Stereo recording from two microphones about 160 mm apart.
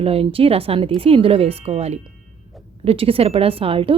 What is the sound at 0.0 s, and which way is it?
Speech, 35° right (ahead or behind).